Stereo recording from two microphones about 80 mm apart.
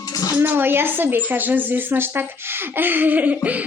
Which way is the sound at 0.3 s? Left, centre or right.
Right.